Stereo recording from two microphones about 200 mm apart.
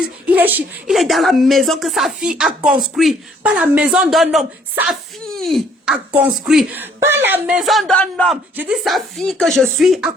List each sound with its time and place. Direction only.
0.0 s speech: 10° right (ahead or behind)